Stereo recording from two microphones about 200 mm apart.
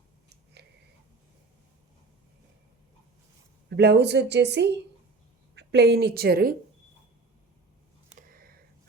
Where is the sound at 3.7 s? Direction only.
55° right (ahead or behind).